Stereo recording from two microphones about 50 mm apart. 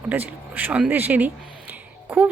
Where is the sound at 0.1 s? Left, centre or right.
Right.